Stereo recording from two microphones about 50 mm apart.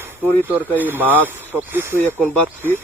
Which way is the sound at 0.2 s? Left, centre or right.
Right.